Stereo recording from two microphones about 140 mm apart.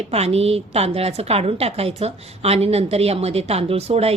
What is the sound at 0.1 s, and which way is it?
Speech, 45° right (ahead or behind).